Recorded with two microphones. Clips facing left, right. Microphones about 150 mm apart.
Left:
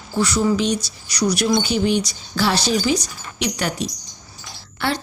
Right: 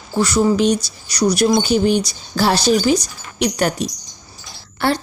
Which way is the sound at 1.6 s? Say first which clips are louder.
Right 4 dB; 45° right (ahead or behind).